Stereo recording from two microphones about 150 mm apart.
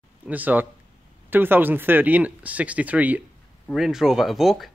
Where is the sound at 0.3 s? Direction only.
10° right (ahead or behind).